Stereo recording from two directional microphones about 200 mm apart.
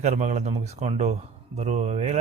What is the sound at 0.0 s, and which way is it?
A man's voice, 35° right (ahead or behind).